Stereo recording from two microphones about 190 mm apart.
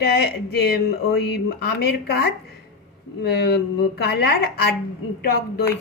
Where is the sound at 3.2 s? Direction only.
60° left (ahead or behind).